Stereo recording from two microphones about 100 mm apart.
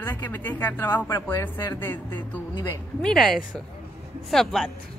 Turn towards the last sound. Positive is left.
turn(degrees=5)  # may be behind; listen again after turning